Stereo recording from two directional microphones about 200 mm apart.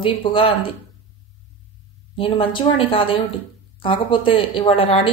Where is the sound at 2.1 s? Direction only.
25° left (ahead or behind).